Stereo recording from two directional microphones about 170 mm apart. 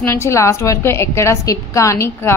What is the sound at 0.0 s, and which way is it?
A woman's voice, 15° left (ahead or behind).